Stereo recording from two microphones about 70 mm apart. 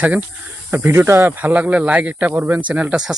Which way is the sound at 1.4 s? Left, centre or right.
Right.